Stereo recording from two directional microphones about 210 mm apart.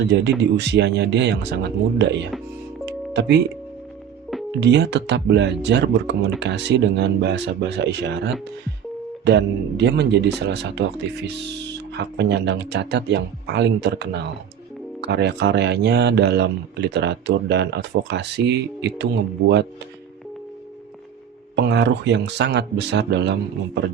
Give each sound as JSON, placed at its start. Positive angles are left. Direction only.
{"t": 0.0, "sound": "speech", "side_deg": -55}
{"t": 2.8, "sound": "music", "side_deg": -55}
{"t": 4.6, "sound": "speech", "side_deg": -55}
{"t": 21.5, "sound": "speech", "side_deg": -55}